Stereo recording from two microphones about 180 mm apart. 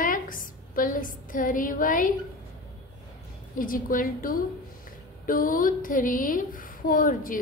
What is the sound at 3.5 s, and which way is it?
A woman's voice, 50° left (ahead or behind).